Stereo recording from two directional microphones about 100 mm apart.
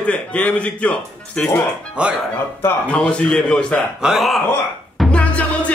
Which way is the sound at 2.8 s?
10° left (ahead or behind).